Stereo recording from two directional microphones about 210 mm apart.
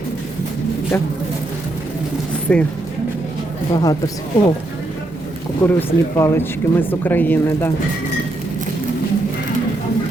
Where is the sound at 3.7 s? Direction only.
20° left (ahead or behind).